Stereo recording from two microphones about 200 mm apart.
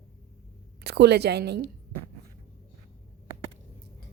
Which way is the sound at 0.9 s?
55° right (ahead or behind).